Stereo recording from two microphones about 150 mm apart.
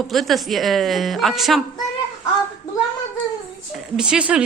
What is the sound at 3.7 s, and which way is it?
Speech, 5° right (ahead or behind).